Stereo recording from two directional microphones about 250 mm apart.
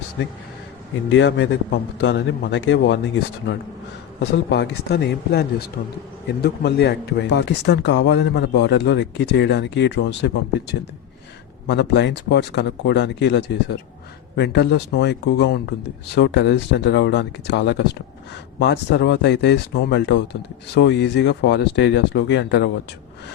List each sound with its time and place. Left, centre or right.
1.1 s a man's voice: left
4.2 s a man's voice: left
11.7 s a man's voice: left